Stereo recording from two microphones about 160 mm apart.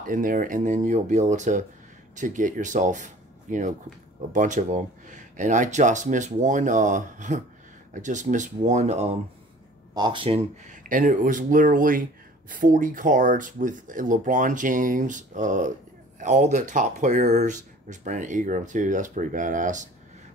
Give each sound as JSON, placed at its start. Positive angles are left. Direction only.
{"t": 0.0, "sound": "speech", "side_deg": -60}
{"t": 9.9, "sound": "speech", "side_deg": -30}
{"t": 10.7, "sound": "speech", "side_deg": -55}